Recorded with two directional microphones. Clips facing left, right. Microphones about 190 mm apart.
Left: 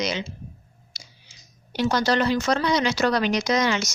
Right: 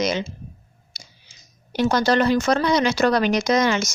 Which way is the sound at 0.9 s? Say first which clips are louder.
Right 2 dB; 50° right (ahead or behind).